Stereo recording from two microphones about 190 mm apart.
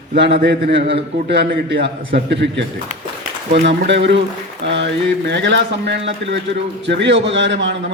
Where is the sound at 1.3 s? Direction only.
60° right (ahead or behind).